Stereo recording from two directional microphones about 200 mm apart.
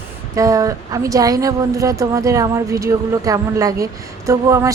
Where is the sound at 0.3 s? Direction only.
15° right (ahead or behind).